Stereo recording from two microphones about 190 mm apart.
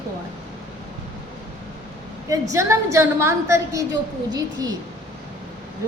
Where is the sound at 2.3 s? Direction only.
15° right (ahead or behind).